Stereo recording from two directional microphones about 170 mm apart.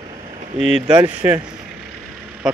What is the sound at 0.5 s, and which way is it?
Speech, 5° right (ahead or behind).